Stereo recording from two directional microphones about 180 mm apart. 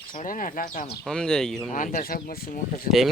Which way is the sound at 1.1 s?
5° left (ahead or behind).